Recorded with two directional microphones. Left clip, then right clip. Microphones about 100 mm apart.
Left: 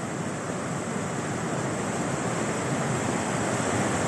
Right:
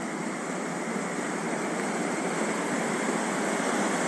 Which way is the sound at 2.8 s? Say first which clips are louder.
Even; 25° right (ahead or behind).